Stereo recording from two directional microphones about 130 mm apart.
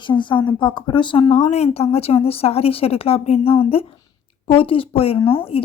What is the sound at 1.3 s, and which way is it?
Speech, 55° left (ahead or behind).